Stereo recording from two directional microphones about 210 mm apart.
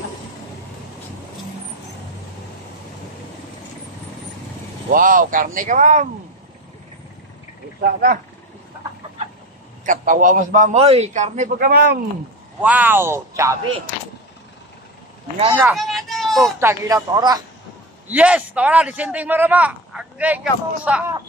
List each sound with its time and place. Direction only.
4.9 s a man's voice: 40° right (ahead or behind)
7.8 s speech: 45° right (ahead or behind)
9.8 s a man's voice: 40° right (ahead or behind)
12.6 s a man's voice: 10° right (ahead or behind)
15.7 s a sound: centre (ahead or behind)
16.5 s a man's voice: 15° right (ahead or behind)
18.0 s a man's voice: 5° right (ahead or behind)